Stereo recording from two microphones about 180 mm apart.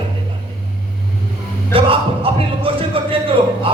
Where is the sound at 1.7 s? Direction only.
30° right (ahead or behind).